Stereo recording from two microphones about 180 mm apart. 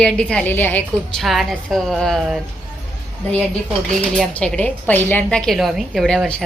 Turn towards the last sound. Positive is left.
turn(degrees=0)  # may be behind; listen again after turning